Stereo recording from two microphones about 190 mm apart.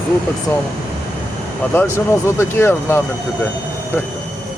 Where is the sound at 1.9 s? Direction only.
15° left (ahead or behind).